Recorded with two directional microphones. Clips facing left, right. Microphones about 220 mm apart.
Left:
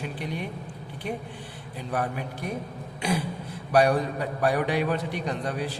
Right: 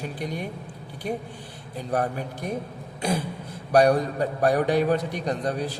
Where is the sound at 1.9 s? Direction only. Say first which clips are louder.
Right 3 dB; 40° right (ahead or behind).